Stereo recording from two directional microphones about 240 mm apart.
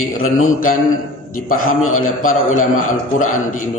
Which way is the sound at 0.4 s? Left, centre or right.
Left.